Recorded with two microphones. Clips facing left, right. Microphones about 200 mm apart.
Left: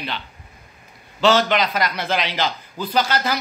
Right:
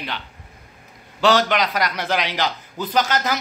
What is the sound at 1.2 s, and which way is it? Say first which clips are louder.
A man's voice: left 1 dB; 15° right (ahead or behind).